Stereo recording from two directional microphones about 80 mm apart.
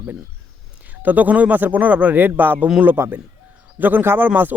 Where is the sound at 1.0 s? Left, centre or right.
Right.